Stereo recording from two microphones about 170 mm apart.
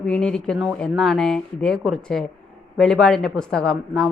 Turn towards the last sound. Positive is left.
turn(degrees=5)  # may be behind; listen again after turning